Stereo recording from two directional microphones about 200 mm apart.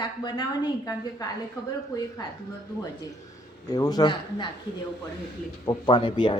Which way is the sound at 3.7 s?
20° left (ahead or behind).